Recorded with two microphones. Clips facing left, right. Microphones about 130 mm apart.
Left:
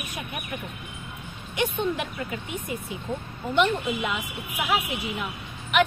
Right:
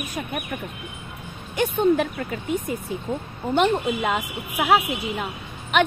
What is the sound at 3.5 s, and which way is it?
A woman's voice, 45° right (ahead or behind).